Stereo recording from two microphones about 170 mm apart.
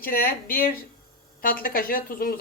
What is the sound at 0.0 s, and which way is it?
A woman's voice, 60° left (ahead or behind).